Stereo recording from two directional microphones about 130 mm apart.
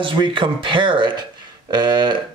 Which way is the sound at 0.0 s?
40° right (ahead or behind).